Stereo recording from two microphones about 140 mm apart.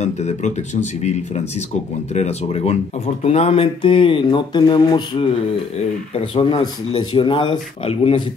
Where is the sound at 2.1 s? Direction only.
50° left (ahead or behind).